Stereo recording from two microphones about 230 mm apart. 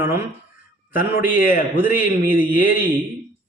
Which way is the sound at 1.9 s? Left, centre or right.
Left.